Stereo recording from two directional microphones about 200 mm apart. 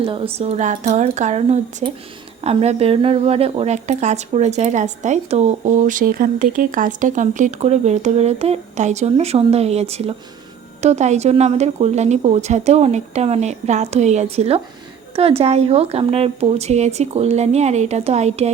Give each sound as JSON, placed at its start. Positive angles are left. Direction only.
{"t": 0.0, "sound": "speech", "side_deg": -25}